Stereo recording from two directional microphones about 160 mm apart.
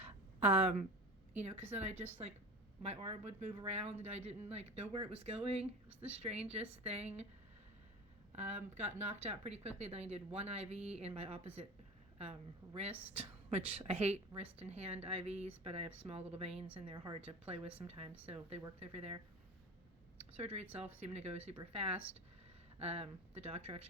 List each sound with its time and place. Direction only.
0.0 s a sound: 45° right (ahead or behind)
1.4 s a woman's voice: 45° right (ahead or behind)
8.4 s a woman's voice: 45° right (ahead or behind)
20.4 s a woman's voice: 40° right (ahead or behind)